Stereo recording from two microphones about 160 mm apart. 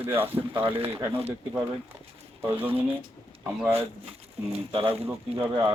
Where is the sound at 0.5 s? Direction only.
35° right (ahead or behind).